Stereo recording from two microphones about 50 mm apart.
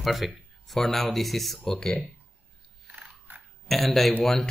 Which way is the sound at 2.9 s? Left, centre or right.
Right.